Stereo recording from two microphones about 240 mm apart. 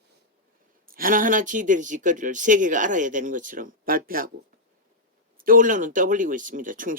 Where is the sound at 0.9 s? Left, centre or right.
Right.